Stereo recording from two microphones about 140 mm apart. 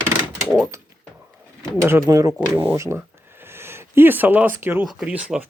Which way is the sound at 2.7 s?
15° right (ahead or behind).